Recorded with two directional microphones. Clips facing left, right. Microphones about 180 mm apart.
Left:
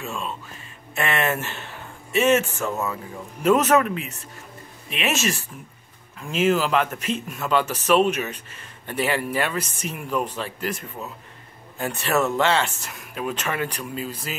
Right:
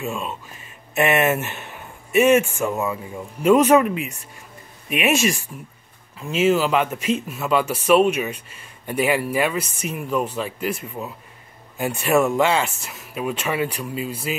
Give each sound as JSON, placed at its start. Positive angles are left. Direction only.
{"t": 0.9, "sound": "speech", "side_deg": -20}